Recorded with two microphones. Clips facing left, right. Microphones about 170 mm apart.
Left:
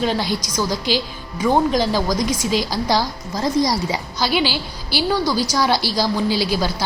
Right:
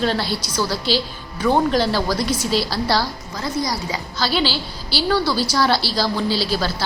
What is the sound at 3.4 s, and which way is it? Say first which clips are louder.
Speech: left 5 dB; 35° left (ahead or behind).